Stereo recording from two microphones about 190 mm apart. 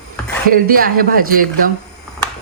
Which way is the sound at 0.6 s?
50° right (ahead or behind).